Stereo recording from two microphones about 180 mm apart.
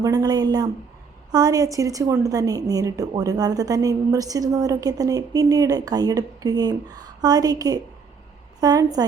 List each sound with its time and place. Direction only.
0.0 s a woman's voice: 20° right (ahead or behind)